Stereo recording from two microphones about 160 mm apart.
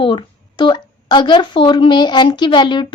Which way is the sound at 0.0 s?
30° left (ahead or behind).